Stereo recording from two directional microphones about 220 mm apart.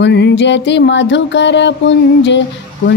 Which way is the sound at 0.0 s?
50° left (ahead or behind).